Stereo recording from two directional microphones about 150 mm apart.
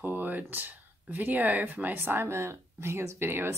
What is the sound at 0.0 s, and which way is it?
Speech, 10° right (ahead or behind).